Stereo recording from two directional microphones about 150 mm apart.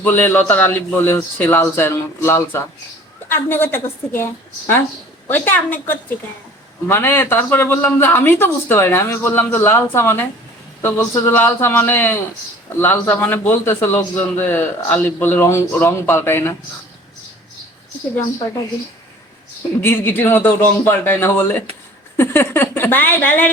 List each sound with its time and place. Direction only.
0.0 s speech: 15° left (ahead or behind)
19.8 s speech: 15° left (ahead or behind)